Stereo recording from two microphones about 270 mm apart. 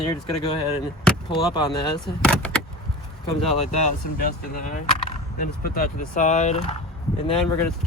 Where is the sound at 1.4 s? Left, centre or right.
Centre.